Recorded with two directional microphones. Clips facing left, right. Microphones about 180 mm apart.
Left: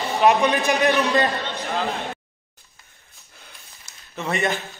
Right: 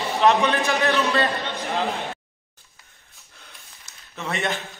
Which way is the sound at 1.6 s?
15° right (ahead or behind).